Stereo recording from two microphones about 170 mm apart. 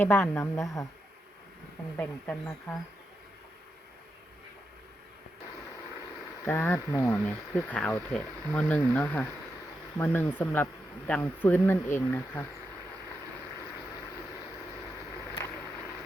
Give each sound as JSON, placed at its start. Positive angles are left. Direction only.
{"t": 0.0, "sound": "speech", "side_deg": 15}
{"t": 2.0, "sound": "speech", "side_deg": 10}
{"t": 6.4, "sound": "speech", "side_deg": 10}